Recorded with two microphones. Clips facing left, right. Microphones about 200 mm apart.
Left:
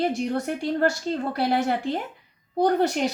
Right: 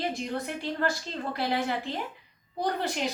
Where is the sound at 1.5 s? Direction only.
45° left (ahead or behind).